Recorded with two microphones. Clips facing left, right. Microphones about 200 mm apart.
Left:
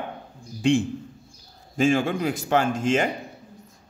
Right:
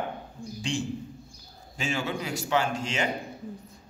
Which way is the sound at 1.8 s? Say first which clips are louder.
Left 10 dB; 50° left (ahead or behind).